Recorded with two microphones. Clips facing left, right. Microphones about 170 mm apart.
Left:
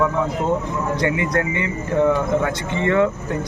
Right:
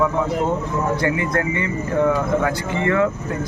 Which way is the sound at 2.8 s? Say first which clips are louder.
Left 1 dB; 25° left (ahead or behind).